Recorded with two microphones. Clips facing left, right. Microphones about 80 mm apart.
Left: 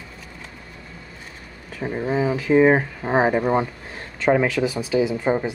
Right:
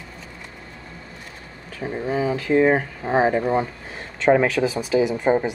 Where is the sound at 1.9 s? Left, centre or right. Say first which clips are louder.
Left 1 dB; centre.